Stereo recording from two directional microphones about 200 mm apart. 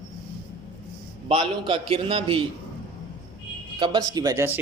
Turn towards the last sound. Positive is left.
turn(degrees=-10)  # may be behind; listen again after turning